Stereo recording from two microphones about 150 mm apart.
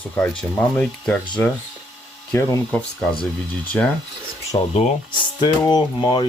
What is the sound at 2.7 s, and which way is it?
Speech, 5° left (ahead or behind).